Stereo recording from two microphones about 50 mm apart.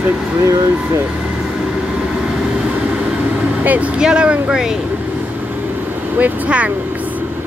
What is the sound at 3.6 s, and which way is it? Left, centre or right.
Speech, right.